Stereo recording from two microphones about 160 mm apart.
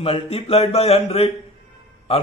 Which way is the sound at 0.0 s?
40° left (ahead or behind).